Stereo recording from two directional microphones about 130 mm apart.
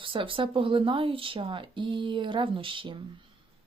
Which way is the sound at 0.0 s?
40° right (ahead or behind).